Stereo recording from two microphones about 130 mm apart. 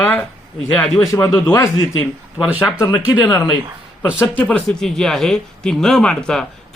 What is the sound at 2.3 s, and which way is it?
Speech, 10° right (ahead or behind).